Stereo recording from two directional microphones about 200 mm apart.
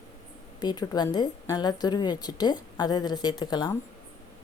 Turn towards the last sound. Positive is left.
turn(degrees=20)  # may be behind; listen again after turning